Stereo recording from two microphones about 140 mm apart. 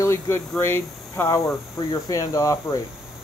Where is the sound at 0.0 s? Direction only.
20° left (ahead or behind).